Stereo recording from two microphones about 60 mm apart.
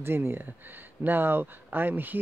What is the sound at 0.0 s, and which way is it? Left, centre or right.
Speech, right.